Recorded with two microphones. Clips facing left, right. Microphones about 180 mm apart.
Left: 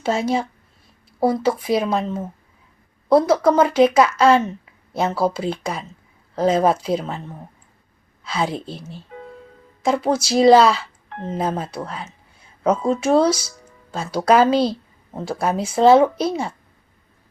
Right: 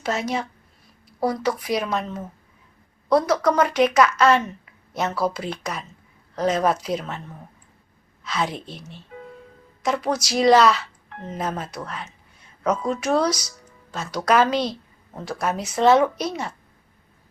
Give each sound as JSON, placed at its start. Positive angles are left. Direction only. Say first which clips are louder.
{"t": 0.0, "sound": "speech", "louder": "left 5 dB", "side_deg": 30}